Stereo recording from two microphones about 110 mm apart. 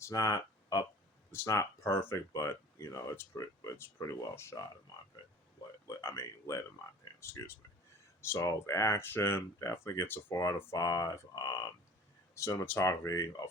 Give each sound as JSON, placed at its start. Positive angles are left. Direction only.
{"t": 0.0, "sound": "a sound", "side_deg": 30}
{"t": 1.3, "sound": "speech", "side_deg": 25}
{"t": 6.0, "sound": "speech", "side_deg": 25}
{"t": 12.6, "sound": "speech", "side_deg": 20}
{"t": 12.9, "sound": "speech", "side_deg": 30}